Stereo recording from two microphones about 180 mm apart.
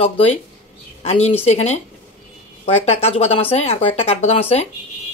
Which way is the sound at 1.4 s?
40° left (ahead or behind).